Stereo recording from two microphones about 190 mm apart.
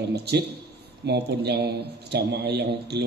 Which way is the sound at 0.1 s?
60° right (ahead or behind).